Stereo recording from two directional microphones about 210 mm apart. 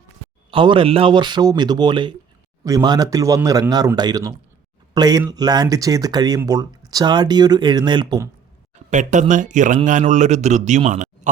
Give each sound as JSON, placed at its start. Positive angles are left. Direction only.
{"t": 0.5, "sound": "a man's voice", "side_deg": -25}
{"t": 8.7, "sound": "speech", "side_deg": -35}